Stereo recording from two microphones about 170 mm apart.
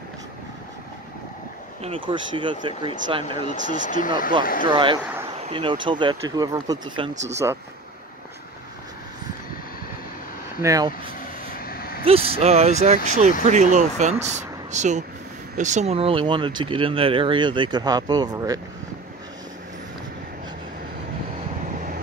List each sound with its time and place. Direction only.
1.8 s speech: 30° right (ahead or behind)
3.4 s speech: 50° left (ahead or behind)
4.6 s speech: 30° right (ahead or behind)
10.6 s speech: 20° right (ahead or behind)
11.5 s vehicle: 60° left (ahead or behind)
12.0 s speech: 35° right (ahead or behind)